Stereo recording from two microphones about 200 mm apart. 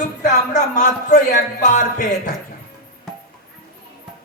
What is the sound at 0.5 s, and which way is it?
A man's voice, 40° left (ahead or behind).